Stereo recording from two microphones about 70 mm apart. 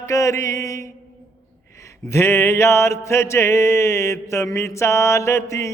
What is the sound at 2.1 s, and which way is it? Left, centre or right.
Mantra, left.